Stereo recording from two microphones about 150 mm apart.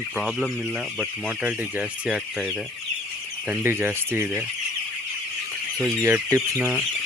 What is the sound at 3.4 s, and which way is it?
Speech, 15° right (ahead or behind).